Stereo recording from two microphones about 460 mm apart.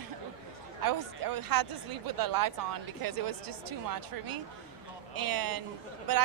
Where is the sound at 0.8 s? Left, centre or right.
Right.